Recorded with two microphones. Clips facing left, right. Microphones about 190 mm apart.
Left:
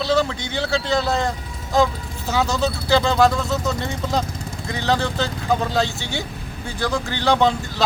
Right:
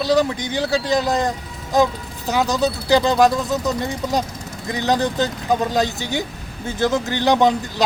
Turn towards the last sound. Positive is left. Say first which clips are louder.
# right 2 dB
turn(degrees=-15)  # may be behind; listen again after turning